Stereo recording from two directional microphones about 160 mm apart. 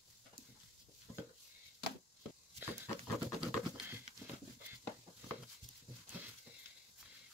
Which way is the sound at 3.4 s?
10° right (ahead or behind).